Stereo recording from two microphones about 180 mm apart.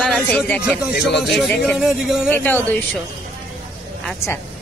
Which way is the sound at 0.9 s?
70° left (ahead or behind).